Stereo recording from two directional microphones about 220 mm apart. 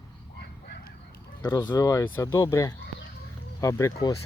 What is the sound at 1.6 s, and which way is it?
Speech, 10° left (ahead or behind).